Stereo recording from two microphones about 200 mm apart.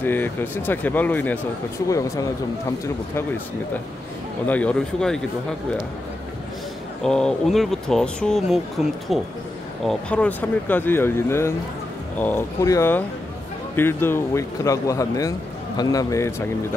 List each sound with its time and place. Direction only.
0.0 s speech: 10° left (ahead or behind)
4.5 s speech: 5° left (ahead or behind)
7.0 s speech: 5° left (ahead or behind)